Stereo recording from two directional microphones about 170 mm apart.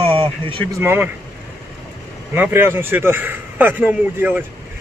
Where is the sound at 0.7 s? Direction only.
15° right (ahead or behind).